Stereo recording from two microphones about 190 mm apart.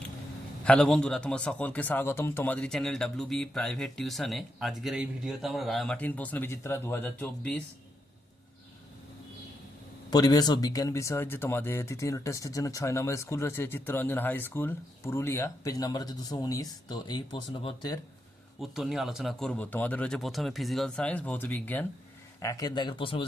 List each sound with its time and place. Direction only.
0.6 s a man's voice: 5° left (ahead or behind)
10.1 s speech: 20° left (ahead or behind)
18.6 s a man's voice: centre (ahead or behind); by 23.2 s 25° left (ahead or behind)